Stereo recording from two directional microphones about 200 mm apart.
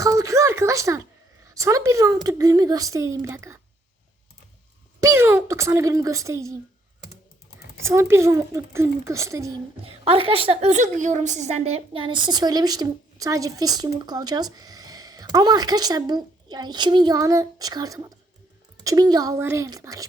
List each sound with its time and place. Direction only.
0.0 s a woman's voice: 15° right (ahead or behind)
5.0 s a woman's voice: 10° right (ahead or behind)
7.8 s a woman's voice: 15° right (ahead or behind)
9.8 s a woman's voice: 30° right (ahead or behind)